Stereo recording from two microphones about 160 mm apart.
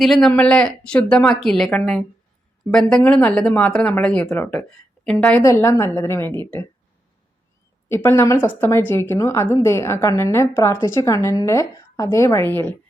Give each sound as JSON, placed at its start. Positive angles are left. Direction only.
{"t": 0.0, "sound": "a woman's voice", "side_deg": 0}
{"t": 5.4, "sound": "a woman's voice", "side_deg": 20}
{"t": 7.9, "sound": "a woman's voice", "side_deg": 15}